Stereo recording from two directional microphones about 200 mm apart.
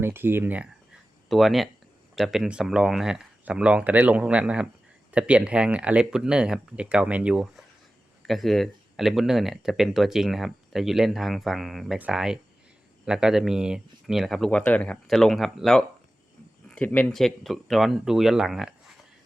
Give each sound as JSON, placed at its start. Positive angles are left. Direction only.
{"t": 0.0, "sound": "speech", "side_deg": -10}